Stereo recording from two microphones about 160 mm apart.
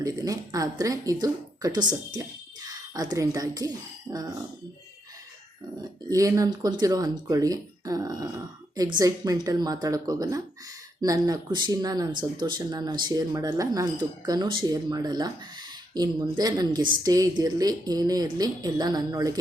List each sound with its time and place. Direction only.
0.0 s speech: 20° right (ahead or behind)
6.1 s speech: 20° right (ahead or behind)